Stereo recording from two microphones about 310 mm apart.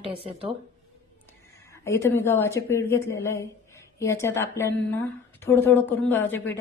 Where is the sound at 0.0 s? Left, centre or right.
Centre.